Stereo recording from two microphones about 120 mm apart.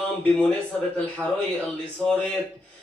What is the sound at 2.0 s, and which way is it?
Speech, 5° left (ahead or behind).